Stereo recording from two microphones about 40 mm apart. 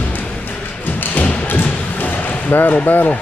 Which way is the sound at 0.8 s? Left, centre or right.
Left.